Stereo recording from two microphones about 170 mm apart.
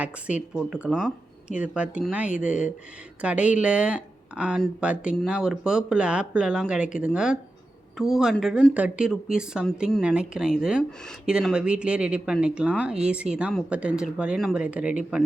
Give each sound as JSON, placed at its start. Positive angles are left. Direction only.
{"t": 0.0, "sound": "speech", "side_deg": -5}